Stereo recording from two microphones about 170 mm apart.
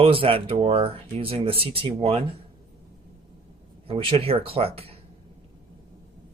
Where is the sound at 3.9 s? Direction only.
35° right (ahead or behind).